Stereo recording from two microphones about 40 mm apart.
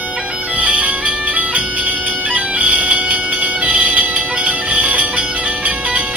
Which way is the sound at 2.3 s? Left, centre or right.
Right.